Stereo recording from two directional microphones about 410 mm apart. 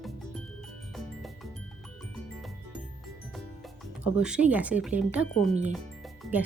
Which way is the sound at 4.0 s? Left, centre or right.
Centre.